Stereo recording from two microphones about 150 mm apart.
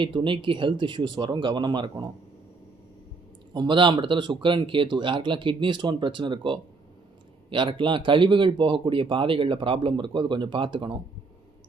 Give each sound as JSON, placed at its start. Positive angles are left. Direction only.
{"t": 0.0, "sound": "speech", "side_deg": -35}
{"t": 3.5, "sound": "speech", "side_deg": -30}